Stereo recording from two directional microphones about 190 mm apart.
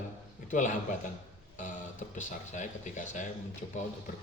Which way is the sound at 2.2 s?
40° left (ahead or behind).